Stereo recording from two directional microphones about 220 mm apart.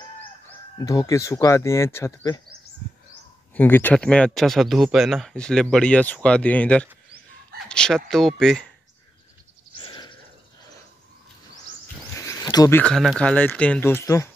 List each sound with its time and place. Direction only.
0.5 s speech: 15° left (ahead or behind)
3.5 s speech: 10° left (ahead or behind)
9.8 s a sound: 20° left (ahead or behind)
12.3 s speech: 15° left (ahead or behind)